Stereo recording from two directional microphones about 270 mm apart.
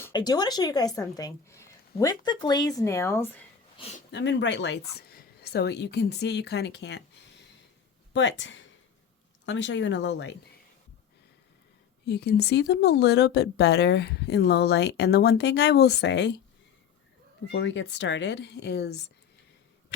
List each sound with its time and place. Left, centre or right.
0.0 s a woman's voice: centre
4.1 s speech: left
8.1 s speech: left
12.0 s speech: left
17.5 s speech: left